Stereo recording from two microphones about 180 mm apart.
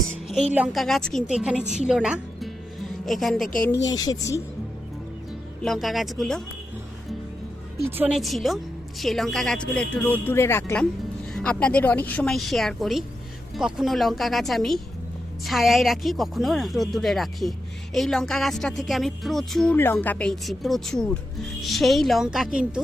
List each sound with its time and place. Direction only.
0.3 s a woman's voice: 5° right (ahead or behind)
3.8 s speech: 20° left (ahead or behind)
5.6 s speech: centre (ahead or behind)
7.9 s speech: 10° right (ahead or behind)